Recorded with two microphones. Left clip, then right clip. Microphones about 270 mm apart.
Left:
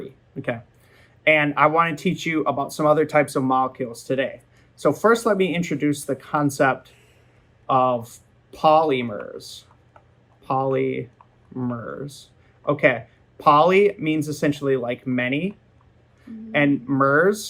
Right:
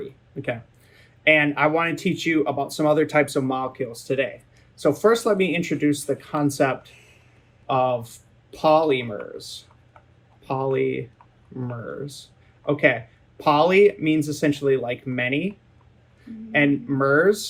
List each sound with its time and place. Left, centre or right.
0.9 s speech: centre